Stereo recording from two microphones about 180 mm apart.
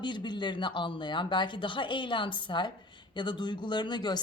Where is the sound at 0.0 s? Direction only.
25° left (ahead or behind).